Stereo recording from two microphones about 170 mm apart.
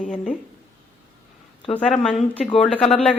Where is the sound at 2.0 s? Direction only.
5° left (ahead or behind).